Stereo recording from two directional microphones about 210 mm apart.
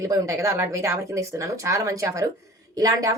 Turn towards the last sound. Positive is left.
turn(degrees=-15)  # may be behind; listen again after turning